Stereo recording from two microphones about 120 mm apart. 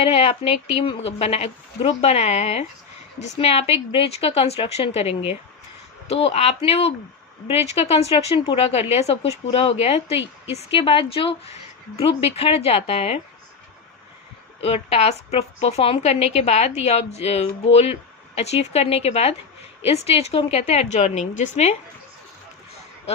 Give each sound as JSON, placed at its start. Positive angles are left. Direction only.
{"t": 0.0, "sound": "a woman's voice", "side_deg": 50}
{"t": 14.6, "sound": "a woman's voice", "side_deg": 55}